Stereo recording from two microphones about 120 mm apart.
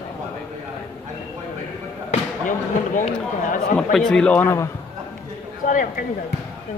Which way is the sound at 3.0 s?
90° left.